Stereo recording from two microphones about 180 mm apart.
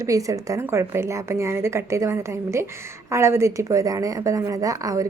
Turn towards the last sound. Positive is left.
turn(degrees=-20)  # may be behind; listen again after turning